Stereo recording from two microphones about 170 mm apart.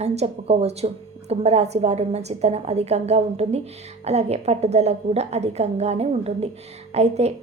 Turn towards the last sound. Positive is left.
turn(degrees=-40)  # may be behind; listen again after turning